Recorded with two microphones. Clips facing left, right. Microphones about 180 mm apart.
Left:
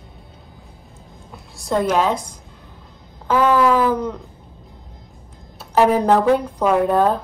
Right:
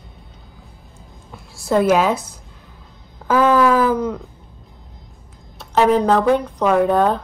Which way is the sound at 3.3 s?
10° right (ahead or behind).